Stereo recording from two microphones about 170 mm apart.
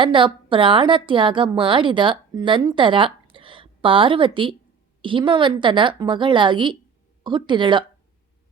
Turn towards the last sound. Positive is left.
turn(degrees=-25)  # may be behind; listen again after turning